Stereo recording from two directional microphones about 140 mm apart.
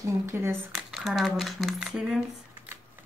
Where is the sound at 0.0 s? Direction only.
20° right (ahead or behind).